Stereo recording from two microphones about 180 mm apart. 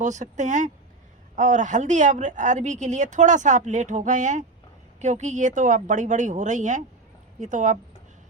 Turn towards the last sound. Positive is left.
turn(degrees=-40)  # may be behind; listen again after turning